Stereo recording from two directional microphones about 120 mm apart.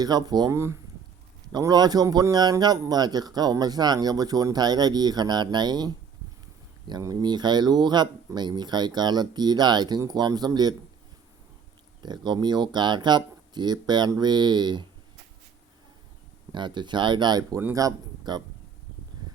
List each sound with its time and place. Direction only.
0.0 s a man's voice: 35° right (ahead or behind)
1.5 s a man's voice: 35° right (ahead or behind)
12.0 s a man's voice: 40° right (ahead or behind)
16.5 s a man's voice: 40° right (ahead or behind)